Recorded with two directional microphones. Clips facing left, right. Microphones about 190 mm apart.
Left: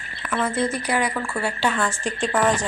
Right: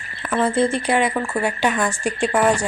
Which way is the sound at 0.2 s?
35° right (ahead or behind).